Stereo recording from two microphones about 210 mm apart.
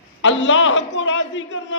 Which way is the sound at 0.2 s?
60° left (ahead or behind).